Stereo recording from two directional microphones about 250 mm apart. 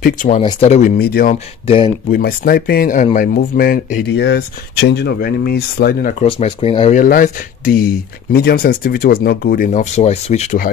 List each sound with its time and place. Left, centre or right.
0.0 s speech: left
6.2 s speech: left